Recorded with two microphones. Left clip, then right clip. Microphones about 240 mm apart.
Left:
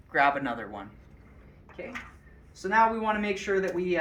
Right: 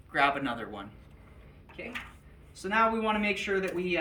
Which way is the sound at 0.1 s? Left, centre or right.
Centre.